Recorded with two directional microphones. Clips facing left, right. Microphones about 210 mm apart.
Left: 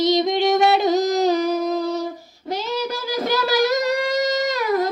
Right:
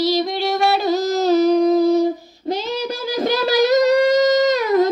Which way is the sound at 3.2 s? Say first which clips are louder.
Right 3 dB; 20° right (ahead or behind).